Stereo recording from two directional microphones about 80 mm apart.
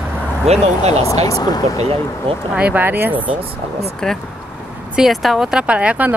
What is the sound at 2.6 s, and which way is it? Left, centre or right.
Speech, right.